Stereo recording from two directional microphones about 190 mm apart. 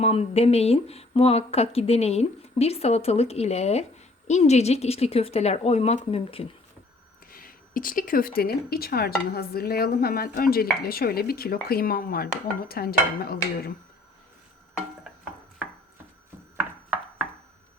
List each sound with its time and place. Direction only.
0.0 s speech: 35° left (ahead or behind)
7.3 s speech: 50° left (ahead or behind)
16.6 s a sound: 5° right (ahead or behind)